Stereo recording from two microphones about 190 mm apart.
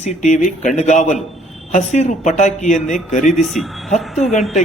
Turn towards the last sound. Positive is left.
turn(degrees=0)  # may be behind; listen again after turning